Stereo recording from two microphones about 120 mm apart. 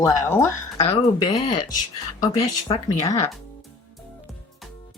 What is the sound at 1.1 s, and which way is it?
A woman's voice, 40° left (ahead or behind).